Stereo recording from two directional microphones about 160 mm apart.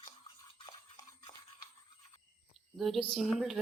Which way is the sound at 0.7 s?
25° left (ahead or behind).